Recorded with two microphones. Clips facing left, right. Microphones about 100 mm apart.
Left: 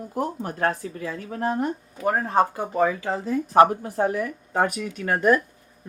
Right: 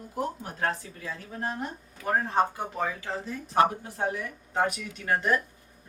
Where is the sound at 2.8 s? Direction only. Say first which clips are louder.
Left 10 dB; 55° left (ahead or behind).